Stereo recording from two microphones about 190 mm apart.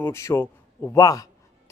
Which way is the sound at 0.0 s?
15° left (ahead or behind).